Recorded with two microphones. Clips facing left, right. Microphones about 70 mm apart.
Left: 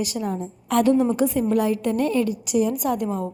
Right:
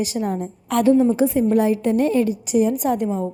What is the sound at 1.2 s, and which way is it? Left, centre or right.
A woman's voice, right.